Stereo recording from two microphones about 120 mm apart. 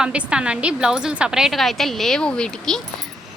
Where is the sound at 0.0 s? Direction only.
10° right (ahead or behind).